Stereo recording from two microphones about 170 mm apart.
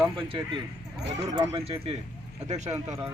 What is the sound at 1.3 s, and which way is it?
Speech, 15° right (ahead or behind).